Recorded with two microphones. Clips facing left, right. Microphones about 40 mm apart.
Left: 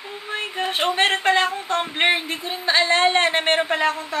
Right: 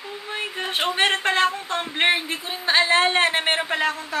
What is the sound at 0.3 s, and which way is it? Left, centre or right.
A woman's voice, centre.